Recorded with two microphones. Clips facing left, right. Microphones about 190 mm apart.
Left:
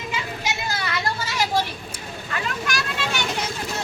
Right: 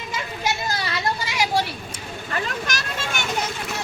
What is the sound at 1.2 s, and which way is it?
Vehicle, 15° right (ahead or behind).